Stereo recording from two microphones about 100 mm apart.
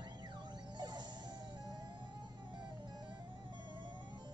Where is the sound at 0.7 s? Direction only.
45° right (ahead or behind).